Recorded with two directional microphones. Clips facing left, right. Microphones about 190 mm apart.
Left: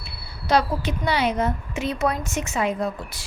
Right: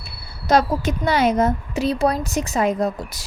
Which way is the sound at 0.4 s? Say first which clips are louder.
Right 4 dB; 45° right (ahead or behind).